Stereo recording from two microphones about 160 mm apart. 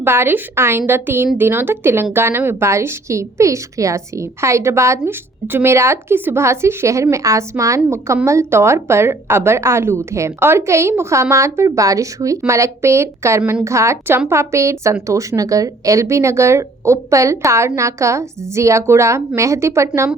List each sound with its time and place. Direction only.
0.0 s a woman's voice: 15° right (ahead or behind)